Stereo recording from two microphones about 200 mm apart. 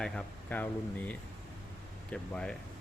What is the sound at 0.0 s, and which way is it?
Speech, 5° left (ahead or behind).